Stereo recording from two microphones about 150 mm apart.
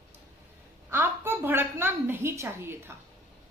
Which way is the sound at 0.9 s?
15° right (ahead or behind).